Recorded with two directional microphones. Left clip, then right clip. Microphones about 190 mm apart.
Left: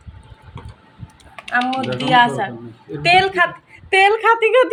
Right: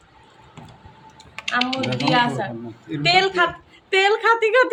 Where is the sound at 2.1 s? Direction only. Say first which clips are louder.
Left 9 dB; 20° left (ahead or behind).